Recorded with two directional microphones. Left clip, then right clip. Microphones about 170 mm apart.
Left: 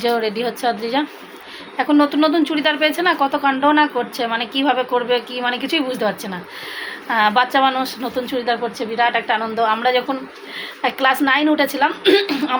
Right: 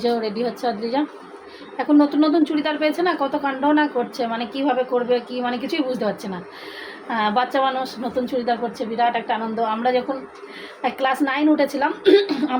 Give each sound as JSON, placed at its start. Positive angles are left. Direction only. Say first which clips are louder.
{"t": 0.0, "sound": "a woman's voice", "louder": "left 3 dB", "side_deg": 5}